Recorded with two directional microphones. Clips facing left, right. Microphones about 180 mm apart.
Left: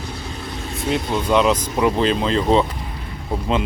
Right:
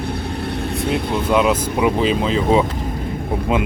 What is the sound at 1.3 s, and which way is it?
Speech, 5° right (ahead or behind).